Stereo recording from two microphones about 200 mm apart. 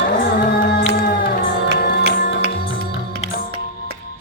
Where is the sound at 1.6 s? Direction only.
55° right (ahead or behind).